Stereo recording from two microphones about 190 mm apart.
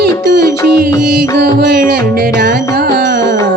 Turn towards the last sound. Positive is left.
turn(degrees=-60)  # may be behind; listen again after turning